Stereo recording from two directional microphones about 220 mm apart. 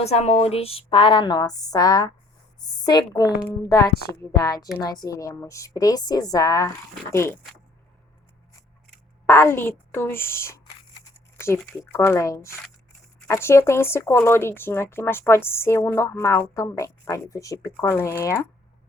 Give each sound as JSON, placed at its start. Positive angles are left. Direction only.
{"t": 0.0, "sound": "a woman's voice", "side_deg": 30}
{"t": 9.2, "sound": "speech", "side_deg": 10}